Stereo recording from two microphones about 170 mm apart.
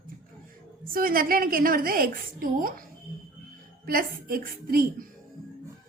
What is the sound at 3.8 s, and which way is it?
Speech, 60° right (ahead or behind).